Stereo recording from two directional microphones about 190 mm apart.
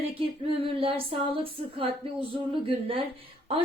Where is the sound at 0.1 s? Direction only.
30° right (ahead or behind).